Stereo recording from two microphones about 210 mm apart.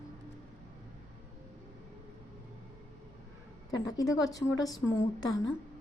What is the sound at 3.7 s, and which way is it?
A woman's voice, 15° left (ahead or behind).